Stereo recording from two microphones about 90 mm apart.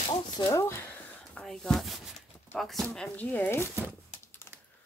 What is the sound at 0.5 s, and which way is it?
Speech, 35° left (ahead or behind).